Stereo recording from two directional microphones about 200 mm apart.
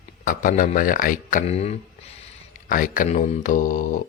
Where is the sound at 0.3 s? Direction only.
40° left (ahead or behind).